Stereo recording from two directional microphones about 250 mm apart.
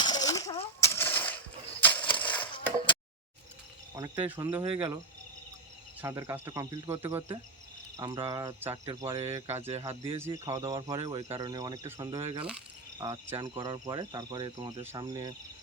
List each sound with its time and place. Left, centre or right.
0.0 s coin: centre
0.8 s a sound: centre
3.9 s speech: centre
4.6 s speech: right
6.0 s speech: centre
9.5 s speech: right
10.2 s speech: centre